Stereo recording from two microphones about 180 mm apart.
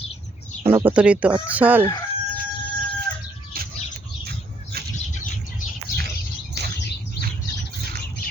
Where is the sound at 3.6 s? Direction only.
55° right (ahead or behind).